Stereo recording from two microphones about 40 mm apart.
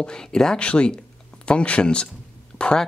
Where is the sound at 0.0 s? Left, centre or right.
Centre.